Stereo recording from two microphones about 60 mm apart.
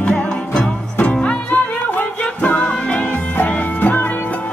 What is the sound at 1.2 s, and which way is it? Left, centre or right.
Music, left.